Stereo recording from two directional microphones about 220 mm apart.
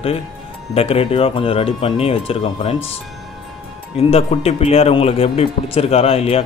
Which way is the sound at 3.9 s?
25° left (ahead or behind).